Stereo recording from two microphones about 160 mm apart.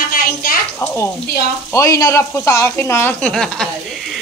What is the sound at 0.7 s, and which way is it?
Speech, 15° left (ahead or behind).